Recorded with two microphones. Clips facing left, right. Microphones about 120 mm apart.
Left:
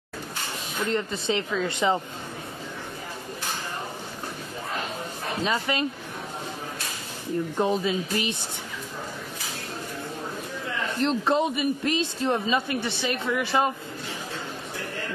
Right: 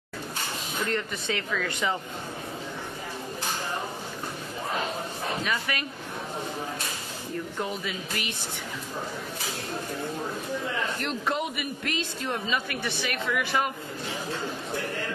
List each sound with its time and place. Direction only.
0.8 s speech: 25° left (ahead or behind)
5.4 s speech: 25° left (ahead or behind)
7.5 s speech: 25° left (ahead or behind)
11.0 s speech: 25° left (ahead or behind)